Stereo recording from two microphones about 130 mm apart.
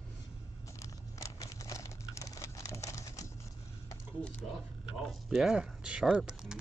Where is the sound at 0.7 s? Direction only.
25° left (ahead or behind).